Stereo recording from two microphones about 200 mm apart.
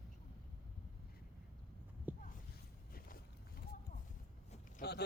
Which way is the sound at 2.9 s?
50° left (ahead or behind).